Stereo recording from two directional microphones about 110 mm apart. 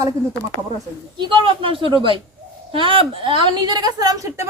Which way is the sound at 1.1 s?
50° right (ahead or behind).